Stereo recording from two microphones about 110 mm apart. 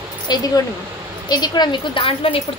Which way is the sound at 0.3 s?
40° left (ahead or behind).